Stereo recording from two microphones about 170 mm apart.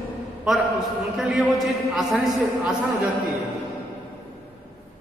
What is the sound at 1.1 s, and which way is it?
A man's voice, centre (ahead or behind).